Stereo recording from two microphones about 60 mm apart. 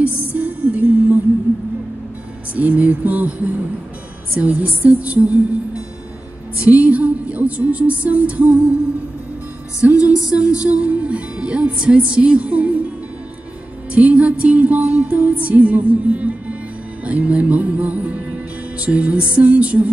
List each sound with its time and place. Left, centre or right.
0.3 s music: right
2.5 s music: right
9.8 s music: centre
10.0 s music: left
10.3 s music: centre
13.9 s music: right